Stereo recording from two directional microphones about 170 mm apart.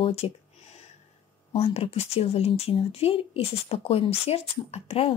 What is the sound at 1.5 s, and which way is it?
Speech, 35° left (ahead or behind).